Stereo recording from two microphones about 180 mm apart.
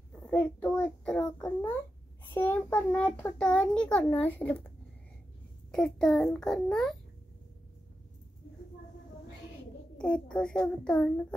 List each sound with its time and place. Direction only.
0.1 s a child's voice: 5° left (ahead or behind)
5.7 s a child's voice: 5° left (ahead or behind)
9.9 s a child's voice: 5° left (ahead or behind)